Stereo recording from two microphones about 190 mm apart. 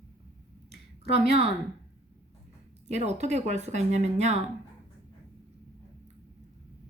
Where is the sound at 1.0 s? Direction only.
35° right (ahead or behind).